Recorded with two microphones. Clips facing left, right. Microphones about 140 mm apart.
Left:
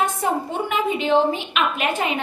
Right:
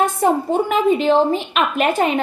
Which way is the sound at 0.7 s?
35° right (ahead or behind).